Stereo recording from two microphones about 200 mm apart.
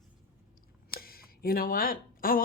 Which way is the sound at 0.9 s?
50° left (ahead or behind).